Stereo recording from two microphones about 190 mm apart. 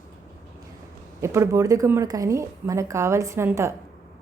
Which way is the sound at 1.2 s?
15° right (ahead or behind).